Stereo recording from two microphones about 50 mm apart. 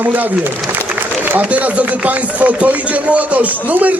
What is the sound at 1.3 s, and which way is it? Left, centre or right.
Speech, right.